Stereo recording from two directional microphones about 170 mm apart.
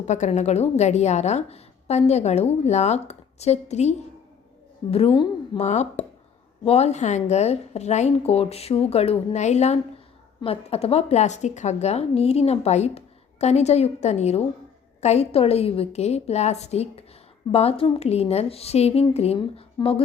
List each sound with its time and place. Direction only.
0.0 s a woman's voice: 45° left (ahead or behind)
5.5 s a woman's voice: 45° left (ahead or behind)